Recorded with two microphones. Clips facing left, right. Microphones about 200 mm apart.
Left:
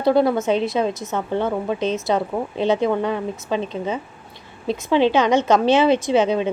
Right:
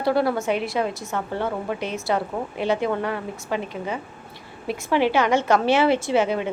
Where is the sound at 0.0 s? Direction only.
20° left (ahead or behind).